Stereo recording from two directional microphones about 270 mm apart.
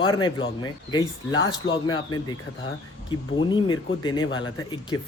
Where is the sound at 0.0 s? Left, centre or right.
Centre.